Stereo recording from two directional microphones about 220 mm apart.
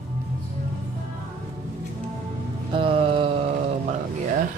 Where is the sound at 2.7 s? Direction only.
25° right (ahead or behind).